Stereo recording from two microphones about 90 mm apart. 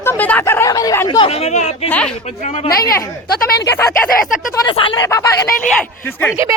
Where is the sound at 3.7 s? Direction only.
30° left (ahead or behind).